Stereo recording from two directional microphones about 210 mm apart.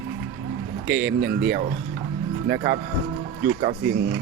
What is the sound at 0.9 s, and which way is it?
Speech, 5° right (ahead or behind).